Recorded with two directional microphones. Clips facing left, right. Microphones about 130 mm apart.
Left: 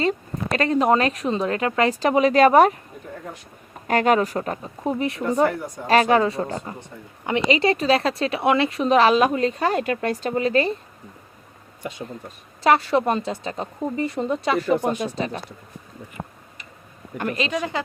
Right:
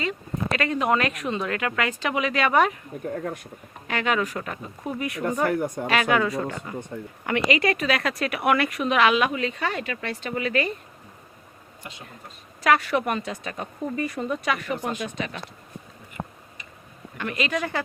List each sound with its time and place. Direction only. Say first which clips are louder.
0.0 s speech: left 5 dB; 35° left (ahead or behind)
3.8 s speech: left 7 dB; 40° left (ahead or behind)
5.5 s speech: right 3 dB; 55° right (ahead or behind)
5.9 s speech: left 6 dB; 35° left (ahead or behind)
12.6 s speech: left 4 dB; 30° left (ahead or behind)
17.2 s speech: left 4 dB; 40° left (ahead or behind)
17.5 s speech: left 1 dB; 15° left (ahead or behind)